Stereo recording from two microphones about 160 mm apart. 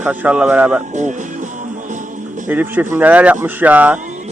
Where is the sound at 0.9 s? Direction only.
50° right (ahead or behind).